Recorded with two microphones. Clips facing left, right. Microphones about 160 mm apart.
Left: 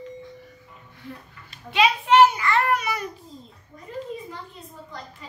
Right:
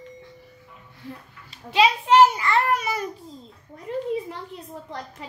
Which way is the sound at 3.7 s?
70° right (ahead or behind).